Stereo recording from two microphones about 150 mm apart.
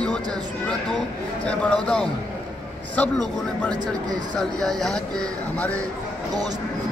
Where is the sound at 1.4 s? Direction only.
10° left (ahead or behind).